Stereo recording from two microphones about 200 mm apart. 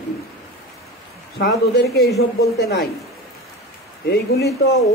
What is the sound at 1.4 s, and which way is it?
Speech, 50° left (ahead or behind).